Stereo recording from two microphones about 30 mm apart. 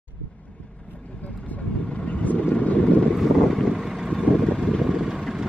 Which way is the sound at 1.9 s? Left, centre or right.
Left.